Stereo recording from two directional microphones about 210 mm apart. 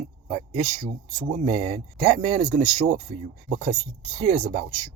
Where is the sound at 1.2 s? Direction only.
25° right (ahead or behind).